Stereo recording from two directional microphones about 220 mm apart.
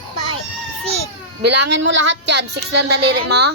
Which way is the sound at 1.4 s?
60° right (ahead or behind).